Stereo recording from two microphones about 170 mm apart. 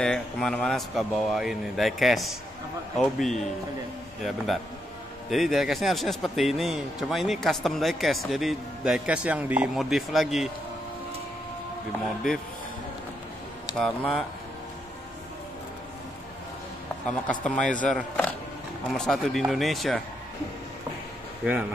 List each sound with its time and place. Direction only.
0.0 s a man's voice: 5° left (ahead or behind)
5.3 s a man's voice: centre (ahead or behind)
13.7 s a man's voice: 5° left (ahead or behind)
17.0 s a man's voice: 5° left (ahead or behind)